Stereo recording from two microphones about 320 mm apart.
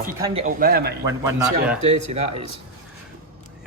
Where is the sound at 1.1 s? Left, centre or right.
Centre.